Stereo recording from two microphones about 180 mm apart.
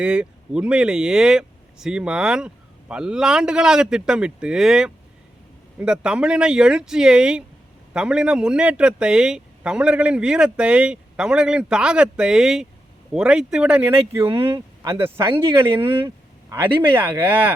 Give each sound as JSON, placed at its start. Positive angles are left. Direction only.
{"t": 0.0, "sound": "speech", "side_deg": -5}
{"t": 15.9, "sound": "speech", "side_deg": -30}
{"t": 16.5, "sound": "speech", "side_deg": -10}